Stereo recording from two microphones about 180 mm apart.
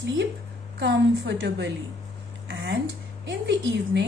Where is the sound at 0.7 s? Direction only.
80° right.